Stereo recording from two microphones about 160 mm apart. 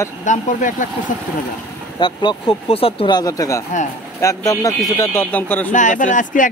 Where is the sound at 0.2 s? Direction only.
50° left (ahead or behind).